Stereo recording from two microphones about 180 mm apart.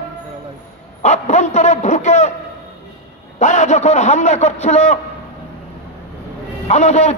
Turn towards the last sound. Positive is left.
turn(degrees=40)  # may be behind; listen again after turning